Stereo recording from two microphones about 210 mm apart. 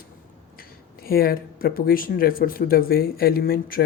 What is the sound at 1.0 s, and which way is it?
Speech, 45° left (ahead or behind).